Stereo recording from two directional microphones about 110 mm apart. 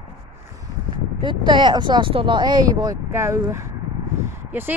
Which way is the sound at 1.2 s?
45° right (ahead or behind).